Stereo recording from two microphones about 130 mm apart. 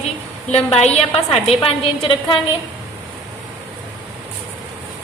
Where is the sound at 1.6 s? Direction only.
45° left (ahead or behind).